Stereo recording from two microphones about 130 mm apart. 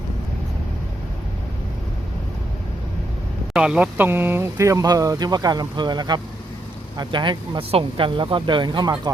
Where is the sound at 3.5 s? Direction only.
5° right (ahead or behind).